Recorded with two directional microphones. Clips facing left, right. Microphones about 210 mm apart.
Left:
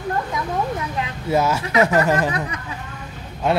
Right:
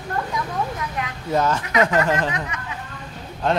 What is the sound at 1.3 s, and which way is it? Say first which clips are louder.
Speech: left 2 dB; 10° left (ahead or behind).